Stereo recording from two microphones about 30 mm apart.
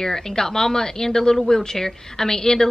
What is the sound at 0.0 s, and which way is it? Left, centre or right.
A woman's voice, centre.